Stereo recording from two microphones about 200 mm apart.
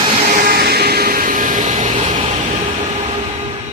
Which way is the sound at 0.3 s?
45° right (ahead or behind).